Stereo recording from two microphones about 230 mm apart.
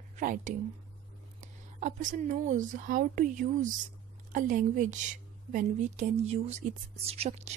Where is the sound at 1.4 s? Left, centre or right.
Right.